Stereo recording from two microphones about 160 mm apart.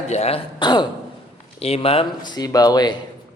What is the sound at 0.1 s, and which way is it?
Speech, 40° left (ahead or behind).